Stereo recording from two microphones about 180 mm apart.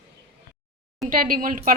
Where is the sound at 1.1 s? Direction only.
50° right (ahead or behind).